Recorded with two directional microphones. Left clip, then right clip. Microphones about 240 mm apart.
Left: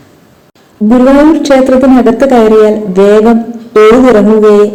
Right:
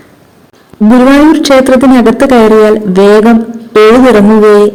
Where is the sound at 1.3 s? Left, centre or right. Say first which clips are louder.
Right 1 dB; right.